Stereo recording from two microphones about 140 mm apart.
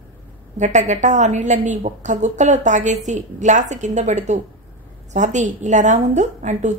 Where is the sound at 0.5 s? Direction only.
60° right (ahead or behind).